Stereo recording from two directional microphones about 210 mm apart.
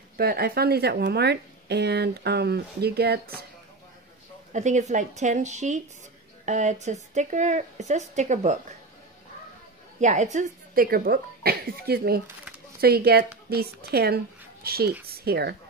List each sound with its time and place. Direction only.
0.2 s speech: 45° right (ahead or behind)
4.5 s speech: 35° right (ahead or behind)
9.9 s speech: 35° right (ahead or behind)